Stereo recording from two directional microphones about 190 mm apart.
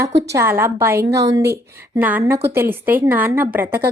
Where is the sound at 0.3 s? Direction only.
15° right (ahead or behind).